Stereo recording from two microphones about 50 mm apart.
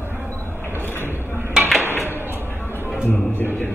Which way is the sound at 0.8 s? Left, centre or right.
Left.